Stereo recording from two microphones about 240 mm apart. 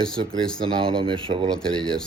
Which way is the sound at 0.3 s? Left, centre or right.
Centre.